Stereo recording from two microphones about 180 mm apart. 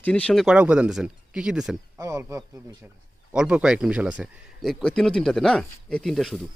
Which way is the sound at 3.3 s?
5° right (ahead or behind).